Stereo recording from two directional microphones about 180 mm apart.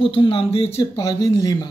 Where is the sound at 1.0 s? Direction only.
20° left (ahead or behind).